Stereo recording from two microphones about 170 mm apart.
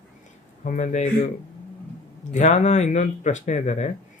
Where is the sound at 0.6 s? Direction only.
45° left (ahead or behind).